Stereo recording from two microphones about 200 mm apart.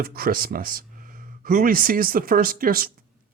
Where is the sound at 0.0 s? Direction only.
50° right (ahead or behind).